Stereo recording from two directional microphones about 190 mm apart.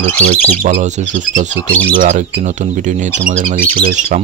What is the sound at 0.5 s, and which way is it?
Speech, 40° right (ahead or behind).